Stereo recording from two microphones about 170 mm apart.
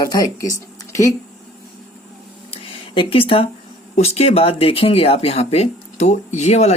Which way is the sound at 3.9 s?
40° left (ahead or behind).